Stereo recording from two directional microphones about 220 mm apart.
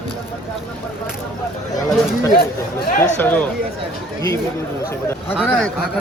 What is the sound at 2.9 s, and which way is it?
Speech, 40° left (ahead or behind).